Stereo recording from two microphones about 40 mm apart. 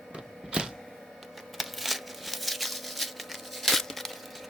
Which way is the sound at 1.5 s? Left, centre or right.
Centre.